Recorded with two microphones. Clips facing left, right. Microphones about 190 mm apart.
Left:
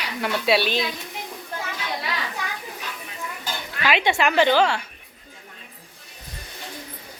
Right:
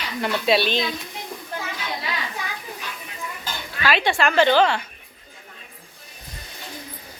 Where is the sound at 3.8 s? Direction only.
20° left (ahead or behind).